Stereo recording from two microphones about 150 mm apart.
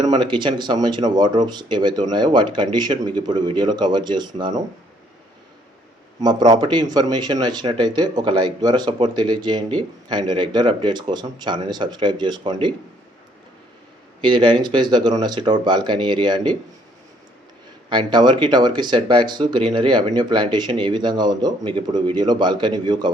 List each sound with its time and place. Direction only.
0.0 s speech: 30° right (ahead or behind)
6.2 s speech: 30° right (ahead or behind)
14.2 s speech: 30° right (ahead or behind)
17.8 s speech: 30° right (ahead or behind)